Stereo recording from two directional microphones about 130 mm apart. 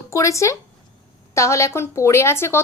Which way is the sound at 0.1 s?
25° left (ahead or behind).